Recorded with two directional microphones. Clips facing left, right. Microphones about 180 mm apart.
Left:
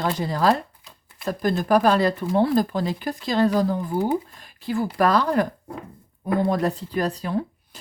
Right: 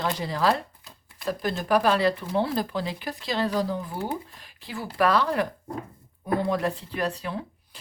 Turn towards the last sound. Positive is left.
turn(degrees=45)  # may be behind; listen again after turning